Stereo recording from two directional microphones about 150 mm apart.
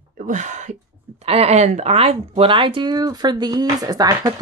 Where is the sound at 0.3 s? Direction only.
55° right (ahead or behind).